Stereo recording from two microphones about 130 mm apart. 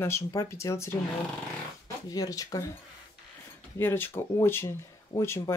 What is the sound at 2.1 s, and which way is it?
Speech, 25° left (ahead or behind).